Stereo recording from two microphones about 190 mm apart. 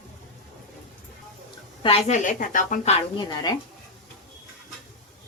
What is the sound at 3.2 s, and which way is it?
Speech, 20° left (ahead or behind).